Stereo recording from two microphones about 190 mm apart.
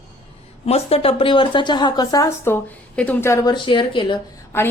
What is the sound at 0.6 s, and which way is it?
A woman's voice, 30° left (ahead or behind).